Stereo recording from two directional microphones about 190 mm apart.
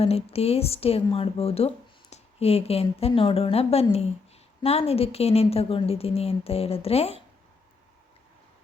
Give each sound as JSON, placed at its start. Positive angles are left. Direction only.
{"t": 0.0, "sound": "a woman's voice", "side_deg": 30}